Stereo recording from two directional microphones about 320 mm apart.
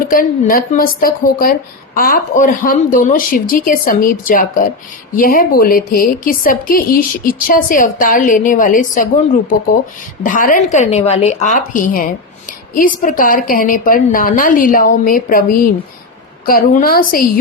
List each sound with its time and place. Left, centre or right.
0.0 s a woman's voice: left
10.2 s a woman's voice: left